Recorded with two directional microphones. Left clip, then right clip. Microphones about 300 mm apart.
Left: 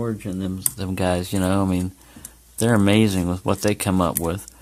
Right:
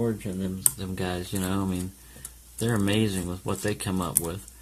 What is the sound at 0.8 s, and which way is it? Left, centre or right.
Speech, left.